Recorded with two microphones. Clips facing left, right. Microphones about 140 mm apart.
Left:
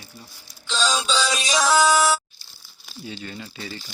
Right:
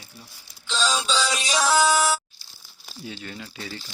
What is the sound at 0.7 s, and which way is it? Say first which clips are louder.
Music: left 1 dB; 90° left.